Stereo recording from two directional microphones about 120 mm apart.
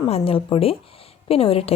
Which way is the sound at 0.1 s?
50° left (ahead or behind).